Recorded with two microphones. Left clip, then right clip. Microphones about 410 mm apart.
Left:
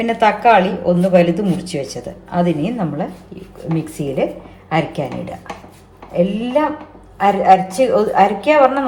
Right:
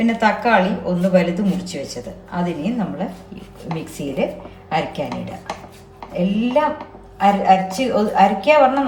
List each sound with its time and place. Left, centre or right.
0.0 s speech: centre
4.0 s speech: left
4.7 s speech: centre
6.1 s speech: centre